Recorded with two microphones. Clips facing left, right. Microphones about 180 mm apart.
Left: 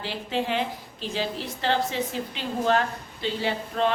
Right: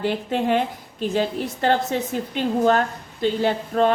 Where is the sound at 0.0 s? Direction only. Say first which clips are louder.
Right 6 dB; 50° right (ahead or behind).